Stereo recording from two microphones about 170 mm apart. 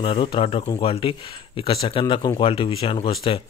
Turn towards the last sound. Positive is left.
turn(degrees=30)  # may be behind; listen again after turning